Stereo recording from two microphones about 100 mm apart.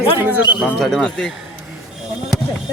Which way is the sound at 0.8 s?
5° left (ahead or behind).